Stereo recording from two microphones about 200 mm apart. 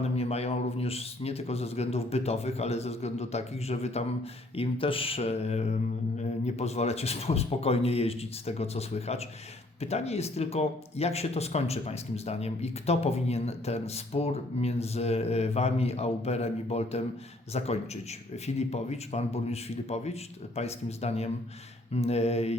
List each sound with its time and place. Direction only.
0.0 s speech: 30° left (ahead or behind)